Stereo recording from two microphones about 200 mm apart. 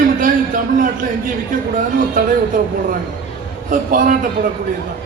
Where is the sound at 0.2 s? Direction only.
40° right (ahead or behind).